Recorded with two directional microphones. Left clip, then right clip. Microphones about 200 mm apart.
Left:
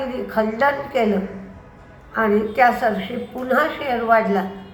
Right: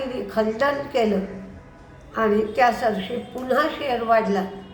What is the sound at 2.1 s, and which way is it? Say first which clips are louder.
A woman's voice: left 2 dB; 10° right (ahead or behind).